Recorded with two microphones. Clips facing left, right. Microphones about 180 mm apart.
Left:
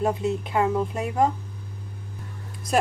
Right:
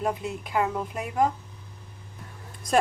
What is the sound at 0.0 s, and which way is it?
Speech, 25° left (ahead or behind).